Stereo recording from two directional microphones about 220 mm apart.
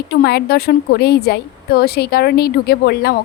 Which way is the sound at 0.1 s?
45° left (ahead or behind).